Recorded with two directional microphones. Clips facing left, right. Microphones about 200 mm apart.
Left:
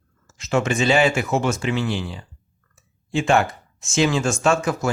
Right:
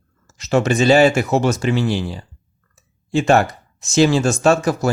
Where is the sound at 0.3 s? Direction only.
40° right (ahead or behind).